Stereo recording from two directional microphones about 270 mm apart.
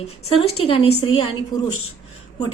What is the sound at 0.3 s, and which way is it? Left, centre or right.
A woman's voice, left.